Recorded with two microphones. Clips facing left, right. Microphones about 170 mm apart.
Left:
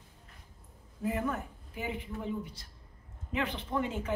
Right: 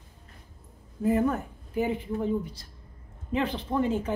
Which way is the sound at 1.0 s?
40° right (ahead or behind).